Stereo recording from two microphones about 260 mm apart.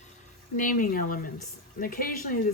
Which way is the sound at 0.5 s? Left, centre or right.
Left.